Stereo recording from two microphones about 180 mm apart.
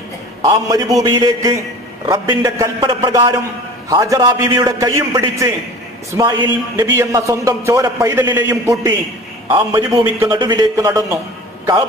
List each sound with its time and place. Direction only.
0.4 s a man's voice: 20° right (ahead or behind)